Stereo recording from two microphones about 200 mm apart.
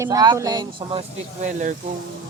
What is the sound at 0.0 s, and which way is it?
Speech, 20° right (ahead or behind).